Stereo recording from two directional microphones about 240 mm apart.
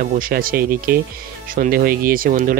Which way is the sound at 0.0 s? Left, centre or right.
Right.